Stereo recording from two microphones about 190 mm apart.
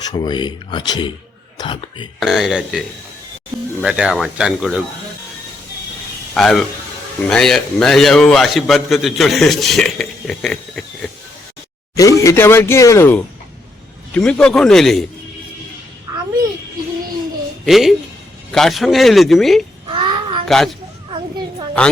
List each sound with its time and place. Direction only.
0.0 s speech: 20° left (ahead or behind)
2.1 s a man's voice: centre (ahead or behind)
6.3 s a man's voice: centre (ahead or behind)
11.9 s a man's voice: 15° left (ahead or behind)
17.7 s a man's voice: centre (ahead or behind)
19.9 s child singing: 25° right (ahead or behind)
21.1 s children playing: 25° right (ahead or behind)